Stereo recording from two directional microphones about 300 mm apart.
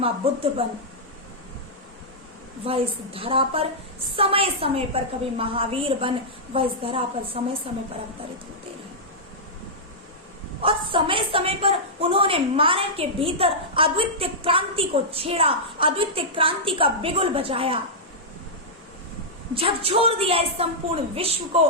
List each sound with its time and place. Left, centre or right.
0.6 s a woman's voice: centre
2.6 s a woman's voice: centre
10.6 s a woman's voice: centre
19.5 s a woman's voice: centre